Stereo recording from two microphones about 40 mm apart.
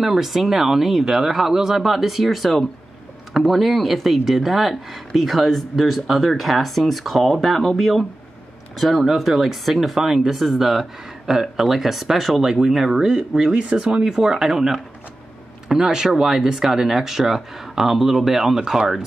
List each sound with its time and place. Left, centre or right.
0.0 s speech: centre